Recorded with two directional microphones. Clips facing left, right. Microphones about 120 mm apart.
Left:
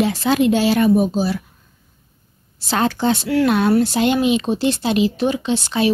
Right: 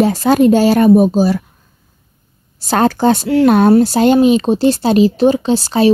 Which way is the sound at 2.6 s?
45° right (ahead or behind).